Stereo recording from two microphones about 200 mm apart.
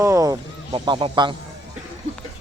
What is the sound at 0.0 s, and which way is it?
Speech, 15° right (ahead or behind).